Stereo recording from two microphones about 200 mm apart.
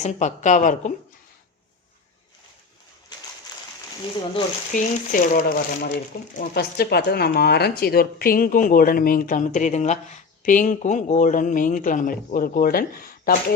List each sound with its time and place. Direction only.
0.0 s a woman's voice: 35° left (ahead or behind)
4.7 s speech: 40° left (ahead or behind)